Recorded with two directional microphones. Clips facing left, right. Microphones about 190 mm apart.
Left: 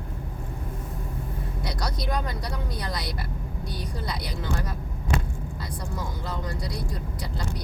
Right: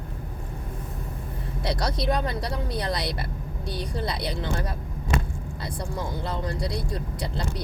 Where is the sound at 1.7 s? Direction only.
25° right (ahead or behind).